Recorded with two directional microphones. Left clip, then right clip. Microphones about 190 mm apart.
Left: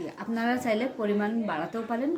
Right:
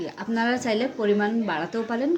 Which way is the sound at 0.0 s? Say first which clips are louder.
Right 4 dB; 30° right (ahead or behind).